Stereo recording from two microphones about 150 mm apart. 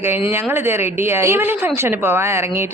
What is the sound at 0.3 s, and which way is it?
A woman's voice, 15° right (ahead or behind).